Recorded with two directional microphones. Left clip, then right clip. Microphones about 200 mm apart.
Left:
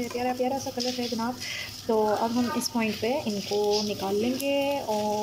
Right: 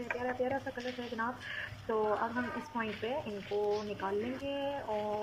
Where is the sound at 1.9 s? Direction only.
20° left (ahead or behind).